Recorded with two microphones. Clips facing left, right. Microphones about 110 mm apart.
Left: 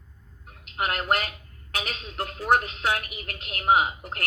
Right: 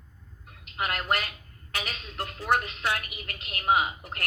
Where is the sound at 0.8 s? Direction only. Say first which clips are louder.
Left 3 dB; 40° left (ahead or behind).